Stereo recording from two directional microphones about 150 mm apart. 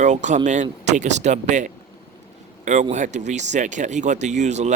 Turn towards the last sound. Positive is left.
turn(degrees=-50)  # may be behind; listen again after turning